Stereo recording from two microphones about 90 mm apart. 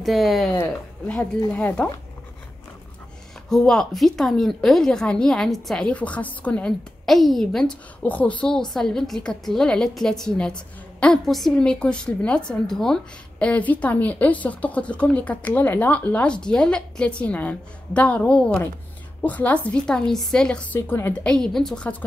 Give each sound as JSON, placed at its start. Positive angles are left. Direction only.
{"t": 0.0, "sound": "a woman's voice", "side_deg": 0}
{"t": 1.5, "sound": "a woman's voice", "side_deg": 15}
{"t": 3.4, "sound": "a woman's voice", "side_deg": 5}
{"t": 7.1, "sound": "a woman's voice", "side_deg": 0}
{"t": 8.0, "sound": "a woman's voice", "side_deg": 15}
{"t": 20.8, "sound": "a woman's voice", "side_deg": 25}
{"t": 21.1, "sound": "a woman's voice", "side_deg": 10}